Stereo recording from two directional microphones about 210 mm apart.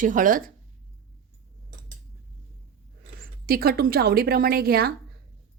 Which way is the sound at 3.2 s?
45° right (ahead or behind).